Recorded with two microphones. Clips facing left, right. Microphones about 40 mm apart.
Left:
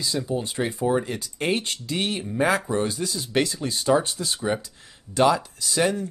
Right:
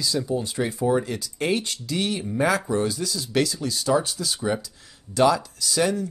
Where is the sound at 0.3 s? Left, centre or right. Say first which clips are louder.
Right 1 dB; left.